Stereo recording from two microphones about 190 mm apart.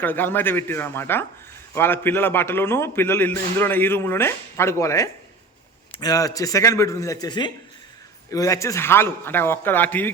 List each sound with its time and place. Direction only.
0.0 s a man's voice: 10° left (ahead or behind)